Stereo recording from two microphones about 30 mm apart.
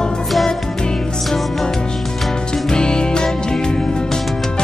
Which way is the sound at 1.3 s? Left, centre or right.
Centre.